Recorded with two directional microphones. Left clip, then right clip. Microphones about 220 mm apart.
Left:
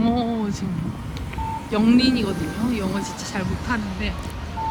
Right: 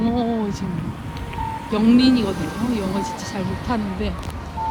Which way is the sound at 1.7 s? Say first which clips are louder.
Right 2 dB; 5° right (ahead or behind).